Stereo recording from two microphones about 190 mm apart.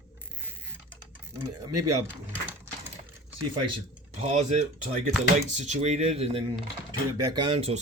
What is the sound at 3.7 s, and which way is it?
Speech, 30° right (ahead or behind).